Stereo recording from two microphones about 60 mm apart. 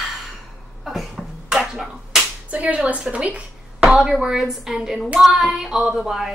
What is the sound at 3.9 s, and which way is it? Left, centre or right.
A woman's voice, centre.